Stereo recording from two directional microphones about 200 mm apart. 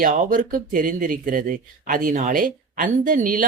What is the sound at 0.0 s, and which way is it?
Speech, 40° right (ahead or behind).